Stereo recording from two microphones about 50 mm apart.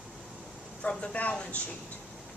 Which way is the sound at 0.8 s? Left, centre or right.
Left.